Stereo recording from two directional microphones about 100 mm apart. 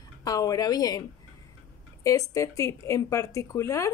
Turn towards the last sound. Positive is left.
turn(degrees=30)  # may be behind; listen again after turning